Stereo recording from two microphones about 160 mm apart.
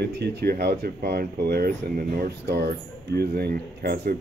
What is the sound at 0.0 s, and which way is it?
Speech, 90° right.